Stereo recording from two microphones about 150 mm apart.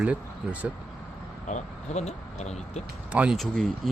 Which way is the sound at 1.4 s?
50° left (ahead or behind).